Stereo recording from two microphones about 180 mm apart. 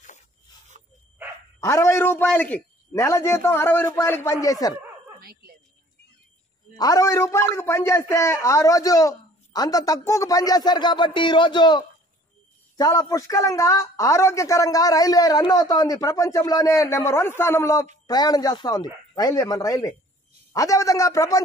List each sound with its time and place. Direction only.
1.6 s a man's voice: 15° left (ahead or behind)
5.2 s a sound: 60° right (ahead or behind)
6.8 s a man's voice: 20° left (ahead or behind)